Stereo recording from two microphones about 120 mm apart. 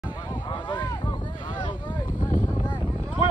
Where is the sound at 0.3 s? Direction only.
40° left (ahead or behind).